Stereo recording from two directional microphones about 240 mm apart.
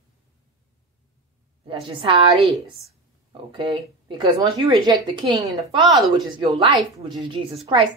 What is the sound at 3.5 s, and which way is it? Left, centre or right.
Speech, centre.